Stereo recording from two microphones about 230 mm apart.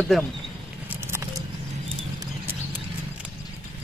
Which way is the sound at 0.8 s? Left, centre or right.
Centre.